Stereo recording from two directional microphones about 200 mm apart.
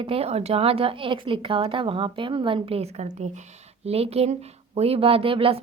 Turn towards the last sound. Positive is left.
turn(degrees=-25)  # may be behind; listen again after turning